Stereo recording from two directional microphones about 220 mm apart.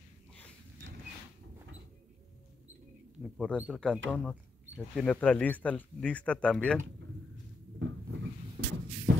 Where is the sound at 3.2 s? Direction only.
Centre (ahead or behind).